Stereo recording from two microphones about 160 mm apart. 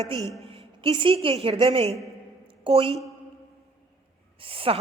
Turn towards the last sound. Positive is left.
turn(degrees=-35)  # may be behind; listen again after turning